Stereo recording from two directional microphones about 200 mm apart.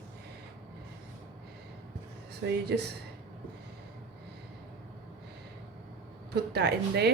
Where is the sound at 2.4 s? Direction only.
55° right (ahead or behind).